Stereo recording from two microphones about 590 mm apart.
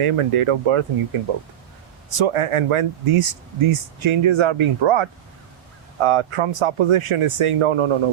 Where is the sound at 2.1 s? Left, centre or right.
Right.